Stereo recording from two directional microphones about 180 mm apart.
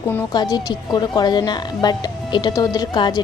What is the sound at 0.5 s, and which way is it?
Speech, 25° left (ahead or behind).